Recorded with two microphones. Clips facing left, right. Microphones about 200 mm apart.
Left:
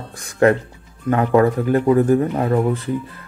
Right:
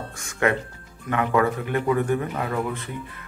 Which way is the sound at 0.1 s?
35° left (ahead or behind).